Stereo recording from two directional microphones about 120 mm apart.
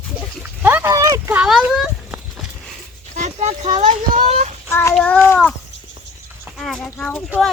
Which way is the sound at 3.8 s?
70° right (ahead or behind).